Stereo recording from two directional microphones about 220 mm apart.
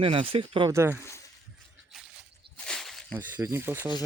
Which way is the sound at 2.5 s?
5° left (ahead or behind).